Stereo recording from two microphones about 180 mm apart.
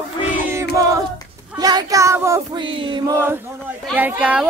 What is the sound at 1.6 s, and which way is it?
Child singing, 20° right (ahead or behind).